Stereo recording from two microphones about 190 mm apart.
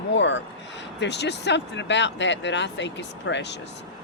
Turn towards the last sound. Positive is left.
turn(degrees=70)  # may be behind; listen again after turning